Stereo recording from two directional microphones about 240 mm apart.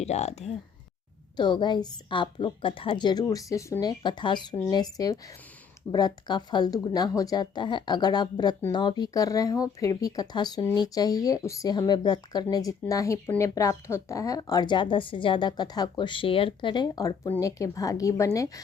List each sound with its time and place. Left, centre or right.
0.0 s speech: left